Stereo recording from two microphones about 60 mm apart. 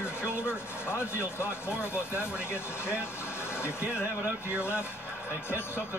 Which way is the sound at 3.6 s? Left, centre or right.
Left.